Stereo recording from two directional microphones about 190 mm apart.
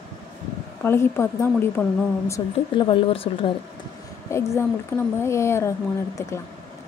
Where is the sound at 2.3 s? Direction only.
25° left (ahead or behind).